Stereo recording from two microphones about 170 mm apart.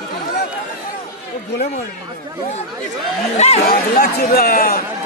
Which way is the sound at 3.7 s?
60° left (ahead or behind).